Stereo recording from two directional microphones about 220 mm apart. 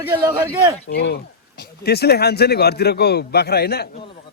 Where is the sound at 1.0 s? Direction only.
50° left (ahead or behind).